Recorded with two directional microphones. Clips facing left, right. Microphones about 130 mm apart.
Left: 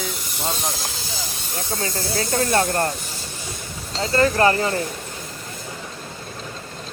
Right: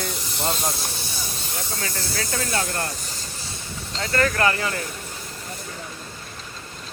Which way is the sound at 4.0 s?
25° left (ahead or behind).